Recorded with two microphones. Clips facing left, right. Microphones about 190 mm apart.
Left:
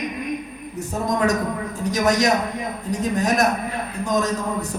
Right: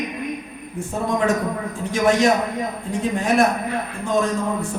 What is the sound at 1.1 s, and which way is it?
A man's voice, 40° left (ahead or behind).